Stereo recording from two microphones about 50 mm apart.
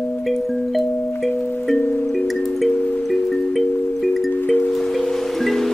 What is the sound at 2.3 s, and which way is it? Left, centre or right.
Music, centre.